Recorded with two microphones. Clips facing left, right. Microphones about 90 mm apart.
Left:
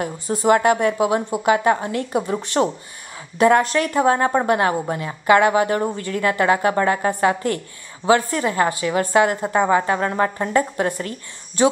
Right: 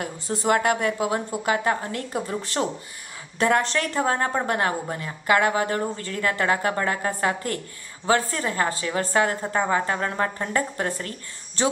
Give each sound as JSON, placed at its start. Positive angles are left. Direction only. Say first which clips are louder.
{"t": 0.3, "sound": "a woman's voice", "louder": "left 6 dB", "side_deg": 15}
{"t": 0.6, "sound": "a woman's voice", "louder": "left 5 dB", "side_deg": 25}